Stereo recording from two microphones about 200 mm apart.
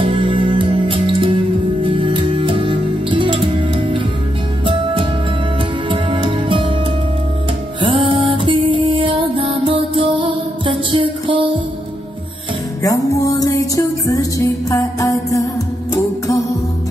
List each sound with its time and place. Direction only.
0.0 s music: 25° right (ahead or behind)
7.8 s music: 25° right (ahead or behind)
12.8 s music: 15° left (ahead or behind)